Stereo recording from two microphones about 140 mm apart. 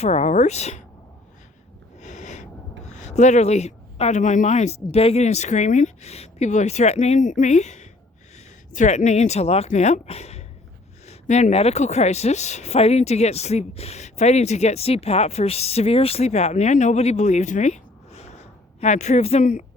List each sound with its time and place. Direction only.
0.0 s speech: 50° left (ahead or behind)
2.0 s a sound: 60° left (ahead or behind)
2.8 s speech: 55° left (ahead or behind)